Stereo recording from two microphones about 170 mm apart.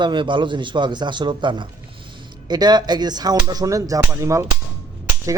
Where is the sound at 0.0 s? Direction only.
30° right (ahead or behind).